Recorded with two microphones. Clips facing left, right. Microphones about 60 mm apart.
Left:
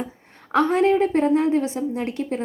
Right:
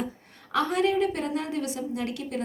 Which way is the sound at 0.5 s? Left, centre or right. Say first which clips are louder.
Left 6 dB; left.